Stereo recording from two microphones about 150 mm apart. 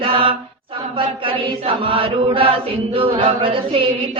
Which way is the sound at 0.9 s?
35° right (ahead or behind).